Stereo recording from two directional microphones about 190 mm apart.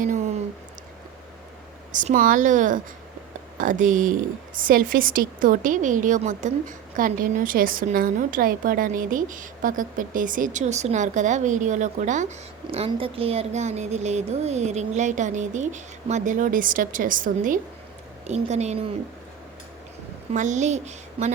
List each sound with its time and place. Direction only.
0.0 s a sound: 40° right (ahead or behind)
1.9 s a woman's voice: 40° right (ahead or behind)
20.3 s speech: 40° right (ahead or behind)